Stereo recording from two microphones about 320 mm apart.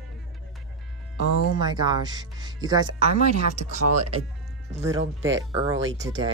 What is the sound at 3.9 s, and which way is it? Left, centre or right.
Speech, right.